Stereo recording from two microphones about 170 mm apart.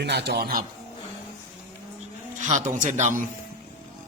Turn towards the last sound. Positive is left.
turn(degrees=-45)  # may be behind; listen again after turning